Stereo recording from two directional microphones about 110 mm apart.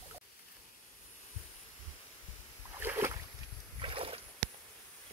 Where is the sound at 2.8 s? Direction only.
20° right (ahead or behind).